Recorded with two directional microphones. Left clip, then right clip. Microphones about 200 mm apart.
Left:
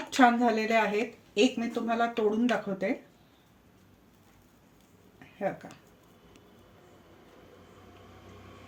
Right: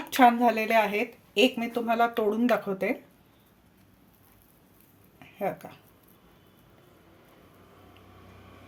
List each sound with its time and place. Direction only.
0.1 s speech: 25° right (ahead or behind)
5.4 s speech: 35° right (ahead or behind)